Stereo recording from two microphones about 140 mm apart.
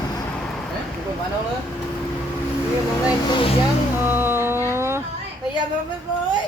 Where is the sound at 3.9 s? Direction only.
15° right (ahead or behind).